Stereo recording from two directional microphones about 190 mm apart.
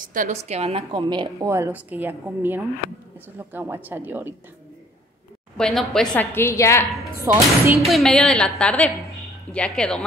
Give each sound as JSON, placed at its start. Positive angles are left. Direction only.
{"t": 0.0, "sound": "a woman's voice", "side_deg": -45}
{"t": 5.6, "sound": "a woman's voice", "side_deg": 5}
{"t": 7.3, "sound": "a woman's voice", "side_deg": -15}
{"t": 7.8, "sound": "a woman's voice", "side_deg": 0}